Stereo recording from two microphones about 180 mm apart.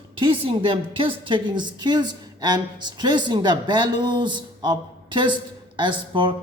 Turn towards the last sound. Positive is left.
turn(degrees=-25)  # may be behind; listen again after turning